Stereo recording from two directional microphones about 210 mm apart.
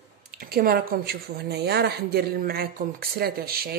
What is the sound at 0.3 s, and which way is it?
Speech, 45° right (ahead or behind).